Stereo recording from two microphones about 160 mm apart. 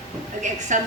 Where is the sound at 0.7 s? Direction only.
50° right (ahead or behind).